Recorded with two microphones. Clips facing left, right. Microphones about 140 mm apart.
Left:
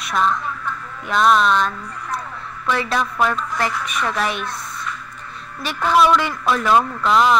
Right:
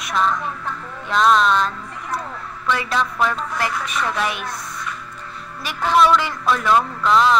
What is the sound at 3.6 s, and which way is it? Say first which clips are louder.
Speech: even; 20° left (ahead or behind).